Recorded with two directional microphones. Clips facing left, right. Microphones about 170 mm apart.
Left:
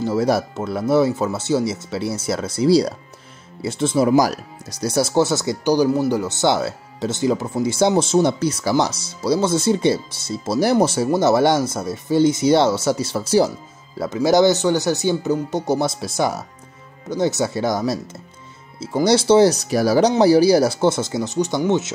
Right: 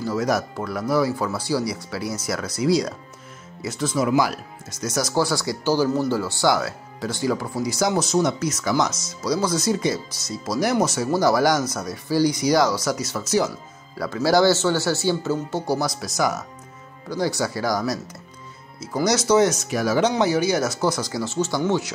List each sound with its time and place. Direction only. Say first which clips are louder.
0.0 s speech: left 4 dB; 30° left (ahead or behind)
13.9 s speech: left 3 dB; 20° left (ahead or behind)